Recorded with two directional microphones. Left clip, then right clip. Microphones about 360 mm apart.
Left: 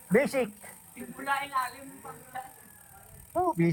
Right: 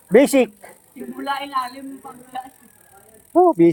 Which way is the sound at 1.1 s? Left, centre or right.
Right.